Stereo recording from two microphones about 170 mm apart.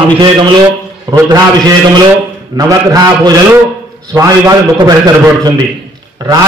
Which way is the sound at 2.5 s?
20° right (ahead or behind).